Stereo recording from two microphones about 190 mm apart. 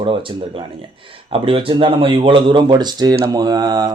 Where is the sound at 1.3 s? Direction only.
30° right (ahead or behind).